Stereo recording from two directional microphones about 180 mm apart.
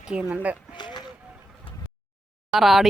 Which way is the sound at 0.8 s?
25° left (ahead or behind).